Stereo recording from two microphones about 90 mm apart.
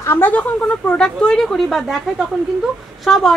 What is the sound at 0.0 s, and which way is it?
Speech, 25° left (ahead or behind).